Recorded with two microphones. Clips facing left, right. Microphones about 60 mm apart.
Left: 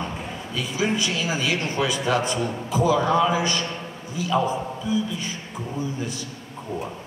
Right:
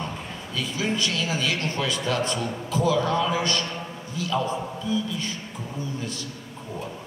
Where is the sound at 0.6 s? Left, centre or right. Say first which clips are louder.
Left 2 dB; centre.